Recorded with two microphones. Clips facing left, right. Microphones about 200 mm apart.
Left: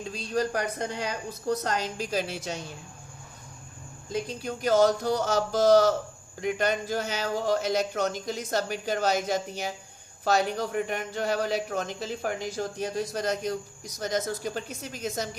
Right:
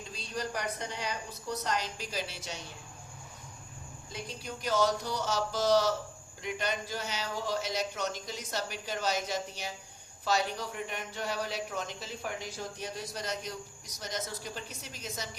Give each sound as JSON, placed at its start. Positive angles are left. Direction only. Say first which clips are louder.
{"t": 0.3, "sound": "speech", "louder": "left 8 dB", "side_deg": 45}
{"t": 4.1, "sound": "speech", "louder": "left 10 dB", "side_deg": 50}